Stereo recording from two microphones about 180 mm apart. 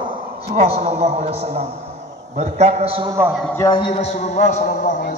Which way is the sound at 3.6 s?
25° left (ahead or behind).